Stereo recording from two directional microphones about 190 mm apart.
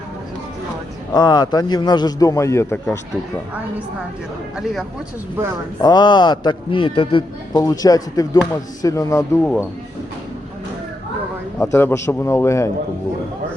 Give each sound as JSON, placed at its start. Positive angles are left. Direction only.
{"t": 1.1, "sound": "a man's voice", "side_deg": 20}
{"t": 5.8, "sound": "a man's voice", "side_deg": 20}
{"t": 11.6, "sound": "a man's voice", "side_deg": 10}